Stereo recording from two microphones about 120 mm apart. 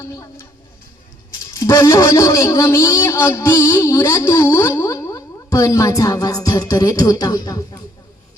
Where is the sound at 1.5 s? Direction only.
25° left (ahead or behind).